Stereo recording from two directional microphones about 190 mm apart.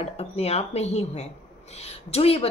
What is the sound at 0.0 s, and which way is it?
A woman's voice, 35° left (ahead or behind).